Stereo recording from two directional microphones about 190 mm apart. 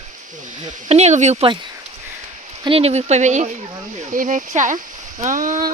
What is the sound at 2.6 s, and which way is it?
Speech, 30° right (ahead or behind).